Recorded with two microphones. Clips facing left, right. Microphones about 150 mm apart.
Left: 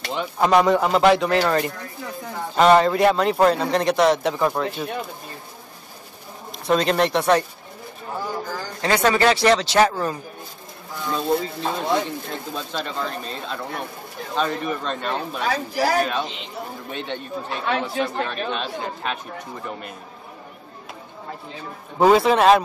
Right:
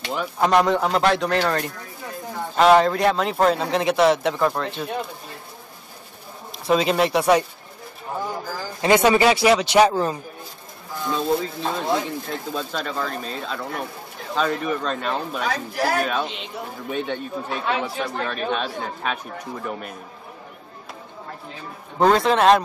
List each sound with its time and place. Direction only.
0.0 s speech: centre (ahead or behind)
6.6 s speech: 5° right (ahead or behind)
8.8 s speech: 15° right (ahead or behind)
11.1 s speech: centre (ahead or behind)
21.9 s speech: 5° left (ahead or behind)